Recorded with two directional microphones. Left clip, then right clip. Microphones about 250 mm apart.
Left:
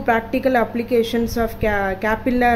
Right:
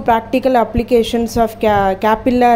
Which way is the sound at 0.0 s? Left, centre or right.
Centre.